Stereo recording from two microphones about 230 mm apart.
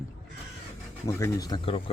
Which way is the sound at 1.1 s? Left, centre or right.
Centre.